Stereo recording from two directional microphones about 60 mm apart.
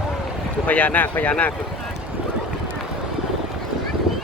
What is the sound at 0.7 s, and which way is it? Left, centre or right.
Speech, left.